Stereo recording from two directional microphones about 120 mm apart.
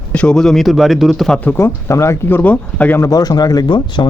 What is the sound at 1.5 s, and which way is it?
Speech, 25° left (ahead or behind).